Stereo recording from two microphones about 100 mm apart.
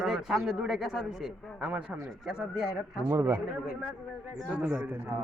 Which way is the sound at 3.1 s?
35° right (ahead or behind).